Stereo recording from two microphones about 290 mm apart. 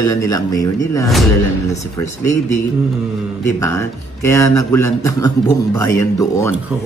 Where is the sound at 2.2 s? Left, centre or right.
Centre.